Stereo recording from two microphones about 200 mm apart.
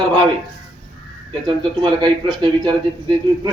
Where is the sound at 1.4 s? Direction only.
20° right (ahead or behind).